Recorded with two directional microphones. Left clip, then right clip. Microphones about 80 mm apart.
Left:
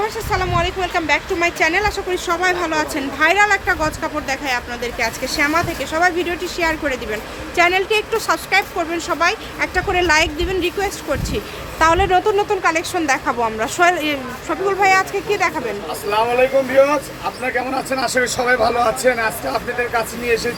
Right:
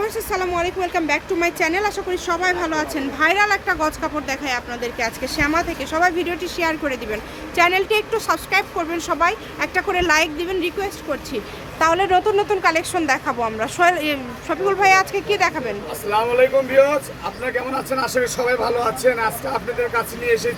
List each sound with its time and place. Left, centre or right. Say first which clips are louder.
0.0 s speech: left 2 dB; centre
2.0 s speech: left 2 dB; centre
10.8 s speech: left 4 dB; centre
16.0 s speech: left 1 dB; right
17.4 s speech: left 2 dB; centre
19.5 s speech: left 2 dB; centre